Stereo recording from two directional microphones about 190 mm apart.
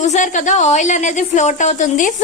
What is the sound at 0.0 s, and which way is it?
A woman's voice, 40° left (ahead or behind).